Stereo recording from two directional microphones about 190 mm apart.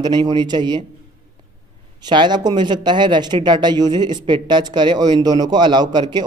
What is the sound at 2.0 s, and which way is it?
Speech, 25° right (ahead or behind).